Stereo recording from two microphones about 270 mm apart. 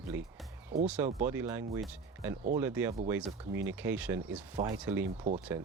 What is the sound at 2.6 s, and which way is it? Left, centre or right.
Speech, centre.